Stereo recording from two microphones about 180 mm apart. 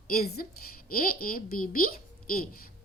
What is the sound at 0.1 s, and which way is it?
A woman's voice, 60° left (ahead or behind).